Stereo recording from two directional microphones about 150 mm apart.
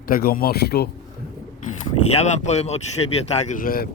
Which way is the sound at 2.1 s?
50° left (ahead or behind).